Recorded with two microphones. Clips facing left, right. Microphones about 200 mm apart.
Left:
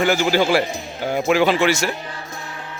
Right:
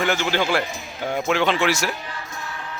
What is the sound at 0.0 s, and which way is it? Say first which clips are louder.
A man's voice: left 5 dB; 5° left (ahead or behind).